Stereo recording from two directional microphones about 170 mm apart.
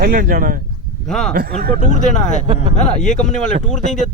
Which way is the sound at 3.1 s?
45° left (ahead or behind).